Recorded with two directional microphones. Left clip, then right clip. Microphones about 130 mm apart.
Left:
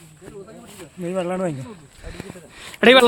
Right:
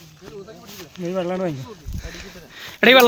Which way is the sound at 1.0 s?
15° right (ahead or behind).